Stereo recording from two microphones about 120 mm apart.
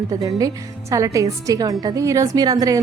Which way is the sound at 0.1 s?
30° right (ahead or behind).